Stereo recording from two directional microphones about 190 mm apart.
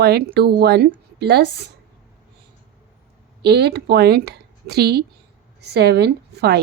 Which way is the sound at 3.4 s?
60° right (ahead or behind).